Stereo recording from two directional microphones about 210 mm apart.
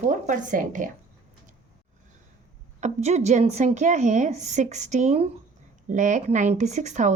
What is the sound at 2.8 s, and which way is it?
Speech, 35° right (ahead or behind).